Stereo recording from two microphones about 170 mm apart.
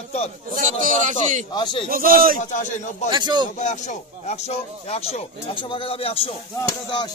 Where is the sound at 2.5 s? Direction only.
45° left (ahead or behind).